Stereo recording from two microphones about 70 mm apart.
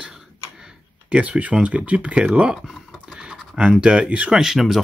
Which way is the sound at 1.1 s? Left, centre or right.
Centre.